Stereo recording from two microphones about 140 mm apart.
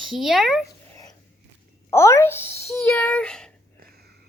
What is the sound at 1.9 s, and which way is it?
Speech, 20° left (ahead or behind).